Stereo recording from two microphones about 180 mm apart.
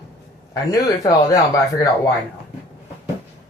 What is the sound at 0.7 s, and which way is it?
A woman's voice, 20° left (ahead or behind).